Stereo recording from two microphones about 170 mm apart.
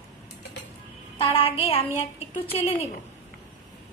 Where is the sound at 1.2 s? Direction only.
35° left (ahead or behind).